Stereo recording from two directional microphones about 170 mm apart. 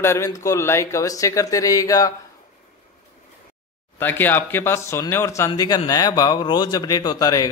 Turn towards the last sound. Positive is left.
turn(degrees=20)  # may be behind; listen again after turning